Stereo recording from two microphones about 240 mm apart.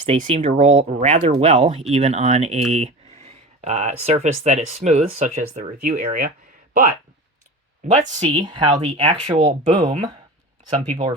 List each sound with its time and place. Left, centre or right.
0.0 s speech: right
8.3 s speech: centre